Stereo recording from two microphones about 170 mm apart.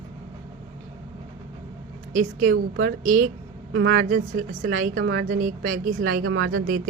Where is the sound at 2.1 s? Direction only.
50° right (ahead or behind).